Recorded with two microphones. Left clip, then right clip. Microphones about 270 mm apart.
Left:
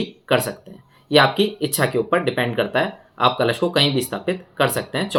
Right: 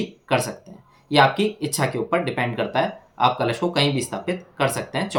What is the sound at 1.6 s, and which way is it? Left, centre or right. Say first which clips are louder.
Speech: left 4 dB; centre.